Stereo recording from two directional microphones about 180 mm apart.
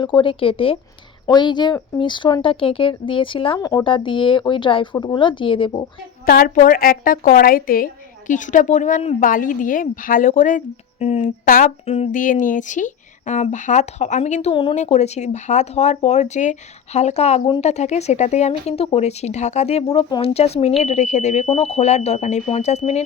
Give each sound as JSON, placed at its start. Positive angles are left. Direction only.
{"t": 0.0, "sound": "speech", "side_deg": 25}
{"t": 6.2, "sound": "speech", "side_deg": 55}
{"t": 14.5, "sound": "speech", "side_deg": 30}